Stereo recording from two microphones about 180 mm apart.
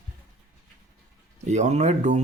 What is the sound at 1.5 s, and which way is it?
Speech, 40° right (ahead or behind).